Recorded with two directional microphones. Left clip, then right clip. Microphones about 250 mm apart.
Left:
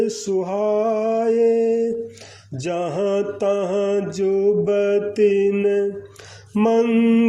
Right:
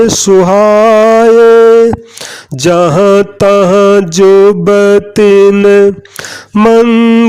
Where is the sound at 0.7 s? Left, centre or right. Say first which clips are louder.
Right 13 dB; right.